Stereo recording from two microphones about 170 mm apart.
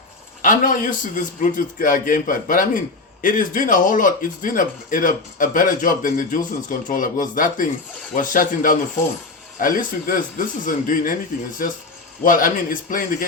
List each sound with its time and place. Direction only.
0.4 s a man's voice: 50° left (ahead or behind)